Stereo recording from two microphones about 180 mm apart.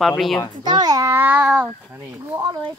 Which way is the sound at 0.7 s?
20° right (ahead or behind).